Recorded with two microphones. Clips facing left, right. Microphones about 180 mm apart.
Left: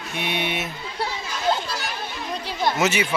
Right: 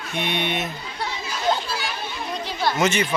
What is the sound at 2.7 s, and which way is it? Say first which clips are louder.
Speech: right 2 dB; 5° left (ahead or behind).